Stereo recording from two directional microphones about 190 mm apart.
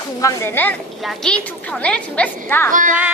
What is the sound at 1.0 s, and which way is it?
A woman's voice, 5° left (ahead or behind).